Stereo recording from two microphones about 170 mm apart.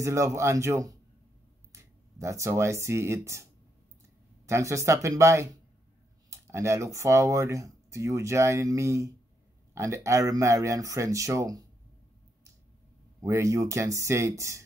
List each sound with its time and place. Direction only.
0.0 s speech: 15° right (ahead or behind)
4.5 s speech: 15° right (ahead or behind)
13.2 s speech: 20° right (ahead or behind)